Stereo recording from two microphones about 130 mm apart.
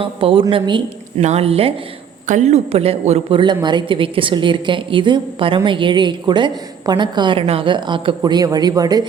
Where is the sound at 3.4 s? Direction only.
35° right (ahead or behind).